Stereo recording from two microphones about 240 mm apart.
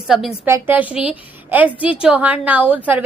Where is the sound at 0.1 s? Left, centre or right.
Centre.